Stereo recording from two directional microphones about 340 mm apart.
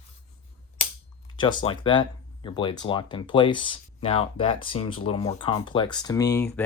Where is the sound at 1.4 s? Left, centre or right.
Centre.